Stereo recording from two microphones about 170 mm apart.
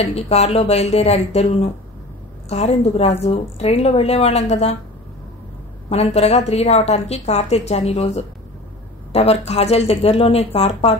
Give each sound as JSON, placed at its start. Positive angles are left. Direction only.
{"t": 0.0, "sound": "a woman's voice", "side_deg": 40}
{"t": 5.9, "sound": "a woman's voice", "side_deg": 40}